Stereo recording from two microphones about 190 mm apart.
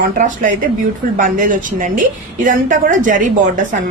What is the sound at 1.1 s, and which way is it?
A woman's voice, 45° right (ahead or behind).